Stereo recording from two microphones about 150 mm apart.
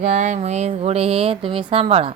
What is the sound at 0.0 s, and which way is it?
A woman's voice, 55° right (ahead or behind).